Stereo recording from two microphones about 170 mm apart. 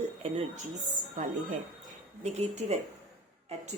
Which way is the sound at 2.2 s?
40° right (ahead or behind).